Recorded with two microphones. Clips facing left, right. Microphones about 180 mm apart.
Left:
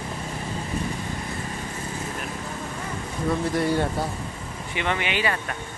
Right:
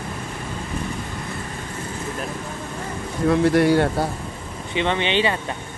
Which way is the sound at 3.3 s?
80° right.